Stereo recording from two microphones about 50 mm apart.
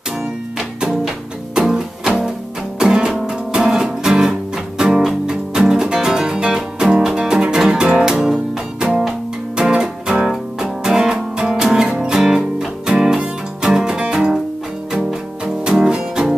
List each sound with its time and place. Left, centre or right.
0.7 s music: centre
2.8 s music: centre
15.4 s music: centre